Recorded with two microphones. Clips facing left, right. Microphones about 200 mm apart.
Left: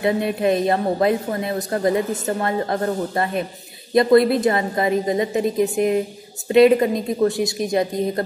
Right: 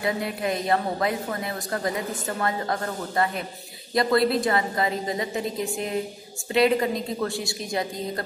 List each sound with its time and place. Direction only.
0.0 s a woman's voice: 25° left (ahead or behind)